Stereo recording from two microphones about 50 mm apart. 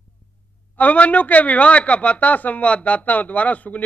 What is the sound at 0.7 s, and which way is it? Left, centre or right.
A man's voice, left.